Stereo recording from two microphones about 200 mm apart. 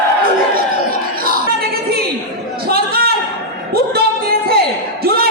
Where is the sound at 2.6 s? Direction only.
50° right (ahead or behind).